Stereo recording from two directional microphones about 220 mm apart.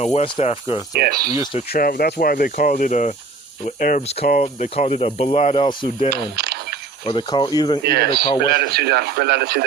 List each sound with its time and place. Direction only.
0.0 s speech: 30° left (ahead or behind)
0.9 s speech: 45° right (ahead or behind)
1.7 s speech: 40° left (ahead or behind); by 6.1 s 25° left (ahead or behind)
6.3 s a sound: 50° right (ahead or behind)
7.0 s speech: 20° left (ahead or behind)
7.9 s speech: 45° right (ahead or behind)